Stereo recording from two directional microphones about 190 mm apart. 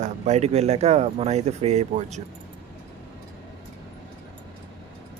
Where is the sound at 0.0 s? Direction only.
35° right (ahead or behind).